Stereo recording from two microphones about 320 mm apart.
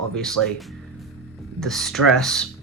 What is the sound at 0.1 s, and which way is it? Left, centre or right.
Speech, centre.